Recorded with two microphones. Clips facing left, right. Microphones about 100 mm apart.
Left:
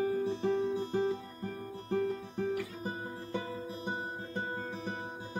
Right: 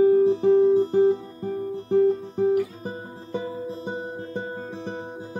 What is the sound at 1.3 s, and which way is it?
Guitar, 20° right (ahead or behind).